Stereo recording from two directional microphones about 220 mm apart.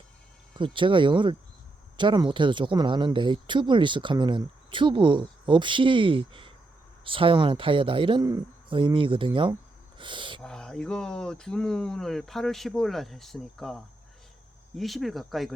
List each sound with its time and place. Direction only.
0.5 s speech: 20° right (ahead or behind)
10.4 s speech: 5° left (ahead or behind)